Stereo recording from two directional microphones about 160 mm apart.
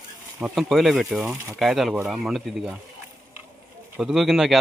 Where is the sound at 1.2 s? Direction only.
20° right (ahead or behind).